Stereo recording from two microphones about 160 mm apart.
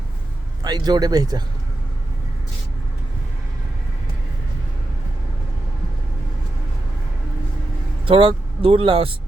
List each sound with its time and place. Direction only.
0.6 s speech: 25° right (ahead or behind)
8.0 s speech: 35° right (ahead or behind)